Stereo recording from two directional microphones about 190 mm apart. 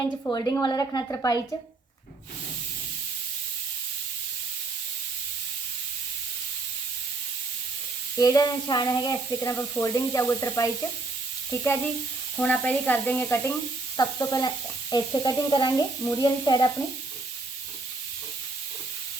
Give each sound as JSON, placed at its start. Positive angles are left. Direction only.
{"t": 0.0, "sound": "speech", "side_deg": 15}
{"t": 8.2, "sound": "speech", "side_deg": 20}
{"t": 12.4, "sound": "speech", "side_deg": 5}
{"t": 13.9, "sound": "sizzle", "side_deg": 20}